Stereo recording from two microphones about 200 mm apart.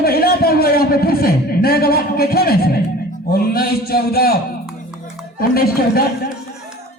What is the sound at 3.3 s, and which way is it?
A man's voice, 50° left (ahead or behind).